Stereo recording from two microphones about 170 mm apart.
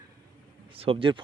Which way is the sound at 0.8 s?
35° right (ahead or behind).